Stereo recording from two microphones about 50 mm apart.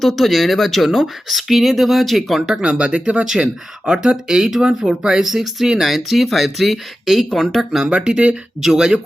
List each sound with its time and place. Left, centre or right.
0.0 s speech: centre
2.6 s speech: centre
7.9 s speech: centre